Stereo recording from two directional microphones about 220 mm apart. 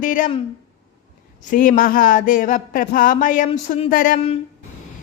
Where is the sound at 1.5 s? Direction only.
35° left (ahead or behind).